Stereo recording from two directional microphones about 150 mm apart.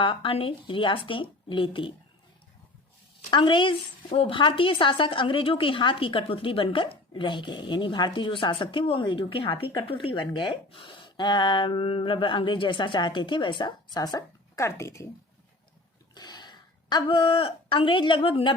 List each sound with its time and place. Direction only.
0.0 s a woman's voice: 35° left (ahead or behind)
3.2 s a woman's voice: 30° left (ahead or behind)
16.1 s a woman's voice: 30° left (ahead or behind)